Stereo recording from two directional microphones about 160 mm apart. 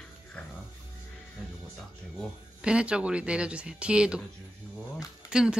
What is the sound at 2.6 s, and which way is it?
Speech, 5° right (ahead or behind).